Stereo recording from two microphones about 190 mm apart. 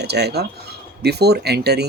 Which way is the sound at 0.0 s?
60° right (ahead or behind).